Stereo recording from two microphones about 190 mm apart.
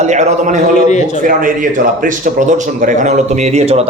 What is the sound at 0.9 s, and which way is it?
Speech, 40° left (ahead or behind).